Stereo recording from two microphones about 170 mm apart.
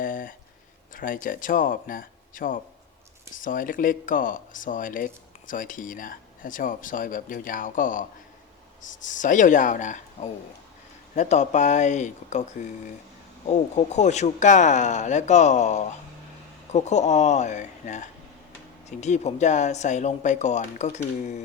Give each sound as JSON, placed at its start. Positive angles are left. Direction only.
{"t": 0.0, "sound": "a sound", "side_deg": 55}
{"t": 0.9, "sound": "speech", "side_deg": 55}
{"t": 13.5, "sound": "speech", "side_deg": 45}